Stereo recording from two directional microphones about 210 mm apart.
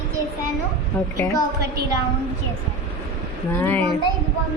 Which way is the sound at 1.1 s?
15° left (ahead or behind).